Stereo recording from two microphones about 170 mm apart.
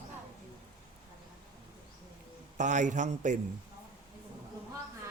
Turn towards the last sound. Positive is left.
turn(degrees=-45)  # may be behind; listen again after turning